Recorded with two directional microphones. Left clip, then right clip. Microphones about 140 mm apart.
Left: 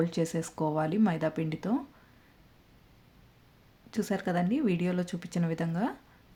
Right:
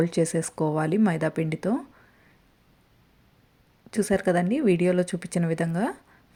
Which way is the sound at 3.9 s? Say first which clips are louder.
Right 8 dB; 35° right (ahead or behind).